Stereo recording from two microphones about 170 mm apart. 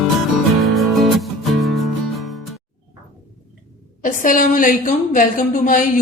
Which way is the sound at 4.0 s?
50° left (ahead or behind).